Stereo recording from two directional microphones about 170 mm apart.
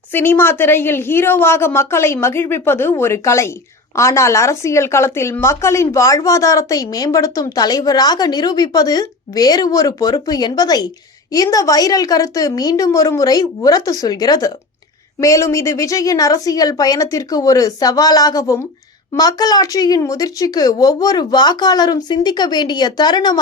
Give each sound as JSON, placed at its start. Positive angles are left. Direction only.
{"t": 0.1, "sound": "a woman's voice", "side_deg": 15}